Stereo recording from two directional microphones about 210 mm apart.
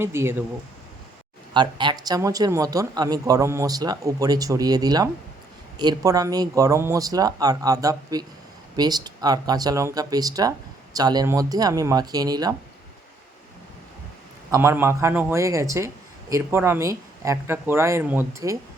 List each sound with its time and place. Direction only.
0.0 s speech: 10° right (ahead or behind)
1.5 s speech: 20° right (ahead or behind)
14.5 s speech: 10° right (ahead or behind)